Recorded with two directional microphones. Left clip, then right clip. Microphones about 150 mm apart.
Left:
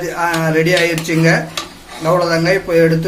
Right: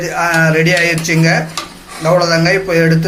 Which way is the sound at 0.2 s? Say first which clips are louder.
Right 3 dB; centre (ahead or behind).